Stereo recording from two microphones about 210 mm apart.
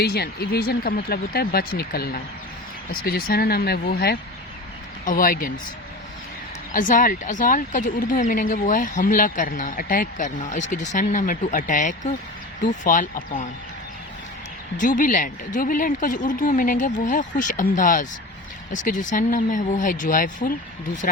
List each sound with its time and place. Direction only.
0.0 s speech: 50° left (ahead or behind)
6.7 s speech: 40° left (ahead or behind)
14.8 s speech: 40° left (ahead or behind)